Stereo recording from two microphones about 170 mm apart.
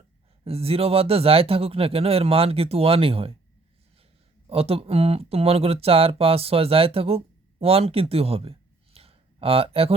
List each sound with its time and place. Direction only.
0.4 s speech: 35° right (ahead or behind)
4.4 s speech: 35° right (ahead or behind)